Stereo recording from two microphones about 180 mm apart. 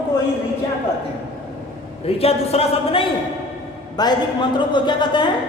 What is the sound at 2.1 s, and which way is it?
A man's voice, 35° left (ahead or behind).